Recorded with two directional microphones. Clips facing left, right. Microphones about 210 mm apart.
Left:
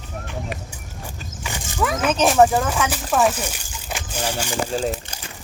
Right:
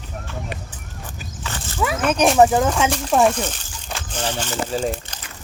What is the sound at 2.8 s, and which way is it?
Speech, 25° right (ahead or behind).